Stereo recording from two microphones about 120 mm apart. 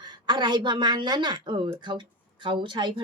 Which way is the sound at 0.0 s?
35° right (ahead or behind).